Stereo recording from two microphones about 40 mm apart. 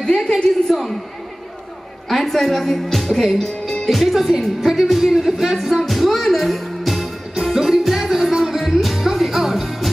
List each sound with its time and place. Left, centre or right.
0.0 s a sound: centre
0.7 s speech: centre
2.0 s speech: centre
7.3 s music: centre